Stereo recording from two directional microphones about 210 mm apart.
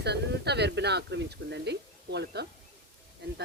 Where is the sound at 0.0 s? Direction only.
50° right (ahead or behind).